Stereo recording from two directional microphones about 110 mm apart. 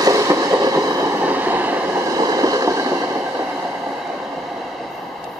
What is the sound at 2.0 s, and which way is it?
Train, 35° right (ahead or behind).